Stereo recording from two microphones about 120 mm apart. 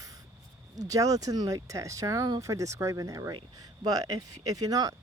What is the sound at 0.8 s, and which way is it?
Speech, 30° right (ahead or behind).